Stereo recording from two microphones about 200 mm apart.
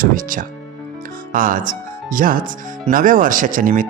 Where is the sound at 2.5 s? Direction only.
40° right (ahead or behind).